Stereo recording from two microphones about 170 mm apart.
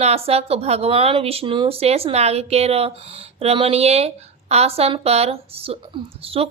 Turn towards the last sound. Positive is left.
turn(degrees=-35)  # may be behind; listen again after turning